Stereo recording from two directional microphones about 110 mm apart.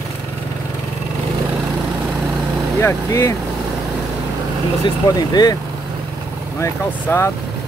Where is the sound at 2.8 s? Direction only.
25° left (ahead or behind).